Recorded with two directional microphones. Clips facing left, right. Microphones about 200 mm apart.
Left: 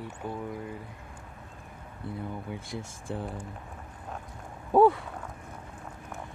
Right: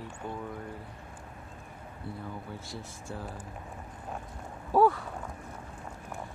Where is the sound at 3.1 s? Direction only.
20° left (ahead or behind).